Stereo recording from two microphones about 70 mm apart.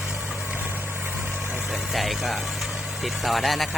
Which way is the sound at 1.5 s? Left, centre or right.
Centre.